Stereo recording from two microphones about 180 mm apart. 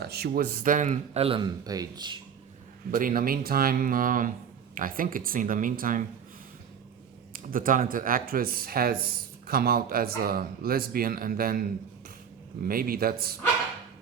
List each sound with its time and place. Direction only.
0.0 s speech: 60° right (ahead or behind); by 2.1 s 20° right (ahead or behind)
2.9 s speech: 50° right (ahead or behind)
7.3 s speech: 50° right (ahead or behind)
12.6 s speech: 55° right (ahead or behind)